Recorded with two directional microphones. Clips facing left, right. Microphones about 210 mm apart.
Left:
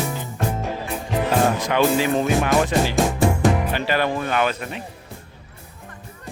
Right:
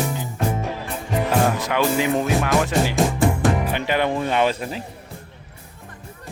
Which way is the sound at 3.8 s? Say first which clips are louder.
Even; 20° right (ahead or behind).